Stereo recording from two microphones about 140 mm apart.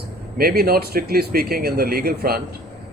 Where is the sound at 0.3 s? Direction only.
90° right.